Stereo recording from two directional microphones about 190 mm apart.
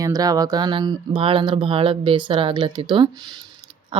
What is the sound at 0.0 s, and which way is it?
Speech, 20° right (ahead or behind).